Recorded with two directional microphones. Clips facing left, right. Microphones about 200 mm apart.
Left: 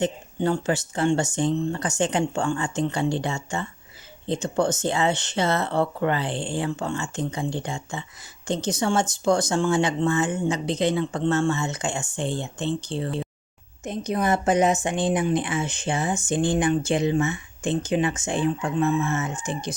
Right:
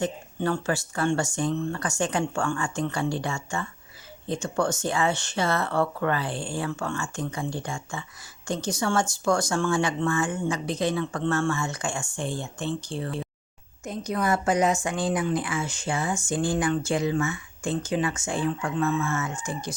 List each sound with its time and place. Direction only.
0.0 s a woman's voice: 20° left (ahead or behind)